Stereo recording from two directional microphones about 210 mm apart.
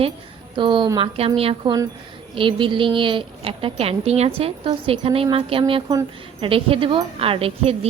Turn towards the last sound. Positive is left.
turn(degrees=-30)  # may be behind; listen again after turning